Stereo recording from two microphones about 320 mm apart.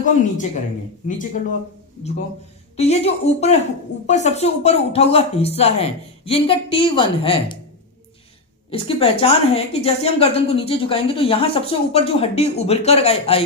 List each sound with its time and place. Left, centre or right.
0.0 s speech: left
2.7 s speech: centre
8.7 s a woman's voice: centre